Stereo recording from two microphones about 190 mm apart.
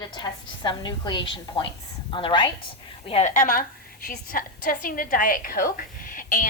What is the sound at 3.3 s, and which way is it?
A woman's voice, 45° left (ahead or behind).